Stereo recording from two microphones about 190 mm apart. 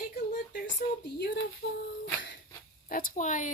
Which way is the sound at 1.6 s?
55° left (ahead or behind).